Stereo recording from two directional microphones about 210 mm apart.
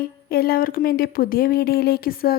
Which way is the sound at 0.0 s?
45° left (ahead or behind).